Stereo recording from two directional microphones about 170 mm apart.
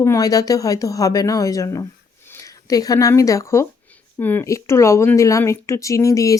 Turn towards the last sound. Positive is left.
turn(degrees=20)  # may be behind; listen again after turning